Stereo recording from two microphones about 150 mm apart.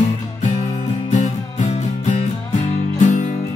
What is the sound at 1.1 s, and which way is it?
Music, 50° left (ahead or behind).